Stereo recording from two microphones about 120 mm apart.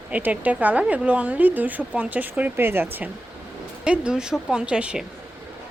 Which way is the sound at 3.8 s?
10° right (ahead or behind).